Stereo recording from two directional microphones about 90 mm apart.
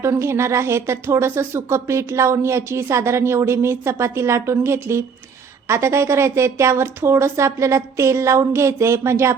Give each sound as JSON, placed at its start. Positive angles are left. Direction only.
{"t": 0.0, "sound": "speech", "side_deg": -30}